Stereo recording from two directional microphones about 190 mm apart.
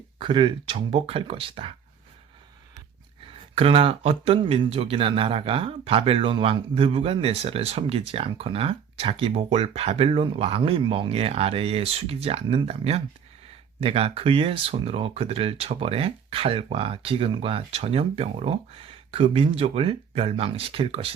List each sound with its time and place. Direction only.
0.2 s speech: 25° right (ahead or behind)
3.5 s speech: 30° right (ahead or behind)